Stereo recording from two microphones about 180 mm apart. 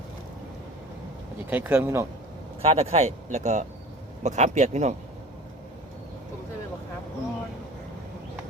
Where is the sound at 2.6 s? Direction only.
35° right (ahead or behind).